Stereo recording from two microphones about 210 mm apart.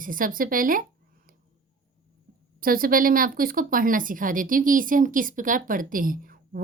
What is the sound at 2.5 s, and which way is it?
A woman's voice, 45° right (ahead or behind).